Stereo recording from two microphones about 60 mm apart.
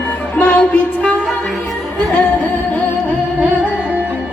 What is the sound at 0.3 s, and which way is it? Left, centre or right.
Music, left.